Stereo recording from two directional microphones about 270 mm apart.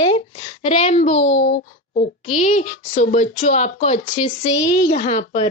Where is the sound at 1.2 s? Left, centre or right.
Left.